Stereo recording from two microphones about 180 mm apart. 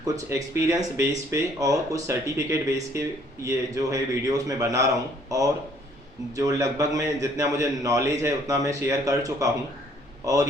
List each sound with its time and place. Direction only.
0.0 s a man's voice: 15° right (ahead or behind)